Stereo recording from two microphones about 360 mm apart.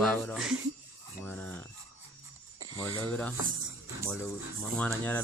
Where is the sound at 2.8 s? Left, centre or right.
Centre.